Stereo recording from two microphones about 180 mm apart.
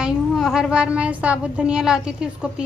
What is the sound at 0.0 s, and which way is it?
A woman's voice, 5° right (ahead or behind).